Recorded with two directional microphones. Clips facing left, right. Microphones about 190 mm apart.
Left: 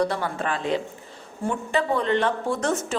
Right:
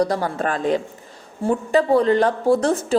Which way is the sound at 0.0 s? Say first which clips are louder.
Right 4 dB; 40° right (ahead or behind).